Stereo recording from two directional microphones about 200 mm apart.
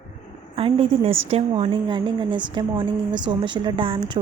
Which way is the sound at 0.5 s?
30° right (ahead or behind).